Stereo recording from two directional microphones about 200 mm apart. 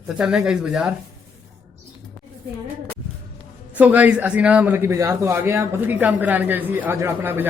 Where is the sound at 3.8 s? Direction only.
10° right (ahead or behind).